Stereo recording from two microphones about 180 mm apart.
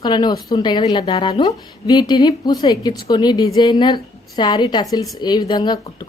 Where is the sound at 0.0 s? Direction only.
25° left (ahead or behind).